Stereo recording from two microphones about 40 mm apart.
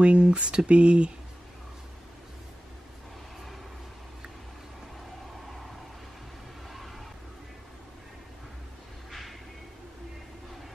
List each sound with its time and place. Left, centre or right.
0.0 s speech: right